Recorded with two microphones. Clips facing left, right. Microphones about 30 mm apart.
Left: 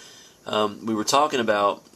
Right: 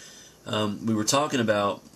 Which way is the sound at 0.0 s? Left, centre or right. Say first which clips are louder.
Left 3 dB; centre.